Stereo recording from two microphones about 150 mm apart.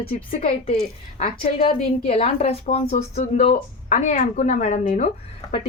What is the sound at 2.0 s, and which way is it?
A woman's voice, 45° left (ahead or behind).